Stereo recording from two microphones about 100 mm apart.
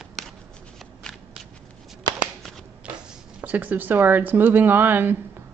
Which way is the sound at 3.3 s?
15° right (ahead or behind).